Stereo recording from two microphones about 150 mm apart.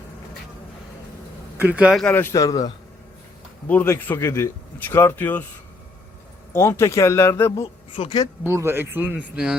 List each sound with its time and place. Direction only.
1.5 s speech: 10° right (ahead or behind)
2.0 s a man's voice: 15° left (ahead or behind)
3.7 s speech: 10° left (ahead or behind)
6.5 s speech: 15° left (ahead or behind)
7.9 s speech: 30° left (ahead or behind)
8.4 s speech: 15° right (ahead or behind)